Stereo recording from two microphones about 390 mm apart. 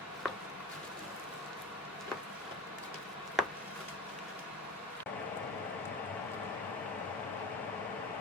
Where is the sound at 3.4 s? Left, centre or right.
Centre.